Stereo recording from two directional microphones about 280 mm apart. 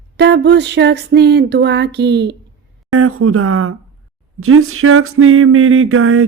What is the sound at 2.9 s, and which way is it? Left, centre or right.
Speech, right.